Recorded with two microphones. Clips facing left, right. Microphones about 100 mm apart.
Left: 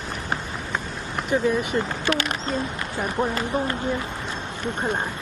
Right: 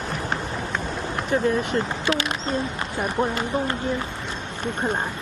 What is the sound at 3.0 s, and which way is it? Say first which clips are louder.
Speech: right 1 dB; centre (ahead or behind).